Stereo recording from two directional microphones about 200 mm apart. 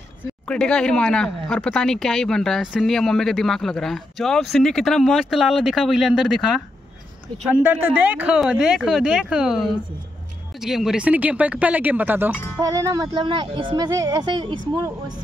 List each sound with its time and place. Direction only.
0.5 s speech: 5° left (ahead or behind)
7.6 s speech: 5° right (ahead or behind)